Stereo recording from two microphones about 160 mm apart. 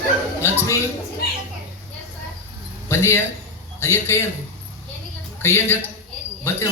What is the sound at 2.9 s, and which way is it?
A man's voice, 15° left (ahead or behind).